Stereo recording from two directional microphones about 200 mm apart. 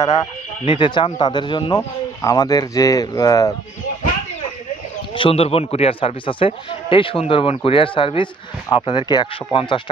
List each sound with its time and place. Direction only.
0.7 s speech: 25° left (ahead or behind)
5.1 s speech: 25° left (ahead or behind)